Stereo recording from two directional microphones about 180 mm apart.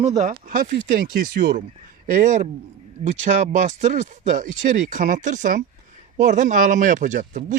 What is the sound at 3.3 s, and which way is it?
Speech, 50° right (ahead or behind).